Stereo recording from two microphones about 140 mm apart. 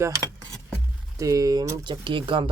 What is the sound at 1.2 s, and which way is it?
Speech, 25° right (ahead or behind).